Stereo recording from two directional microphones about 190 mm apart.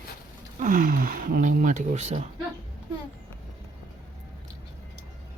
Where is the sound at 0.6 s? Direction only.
45° right (ahead or behind).